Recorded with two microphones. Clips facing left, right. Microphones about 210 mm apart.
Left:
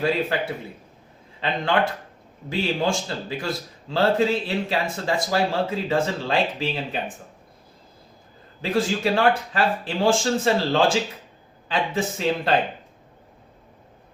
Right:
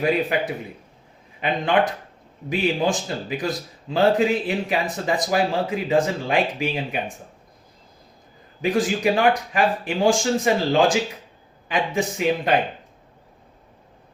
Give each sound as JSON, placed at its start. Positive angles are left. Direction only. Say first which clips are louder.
{"t": 0.0, "sound": "a man's voice", "louder": "right 2 dB", "side_deg": -15}
{"t": 8.6, "sound": "a man's voice", "louder": "right 2 dB", "side_deg": -15}